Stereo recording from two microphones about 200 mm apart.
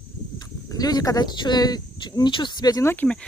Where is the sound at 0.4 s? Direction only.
20° left (ahead or behind).